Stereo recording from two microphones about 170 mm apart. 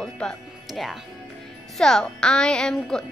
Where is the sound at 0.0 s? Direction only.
5° left (ahead or behind).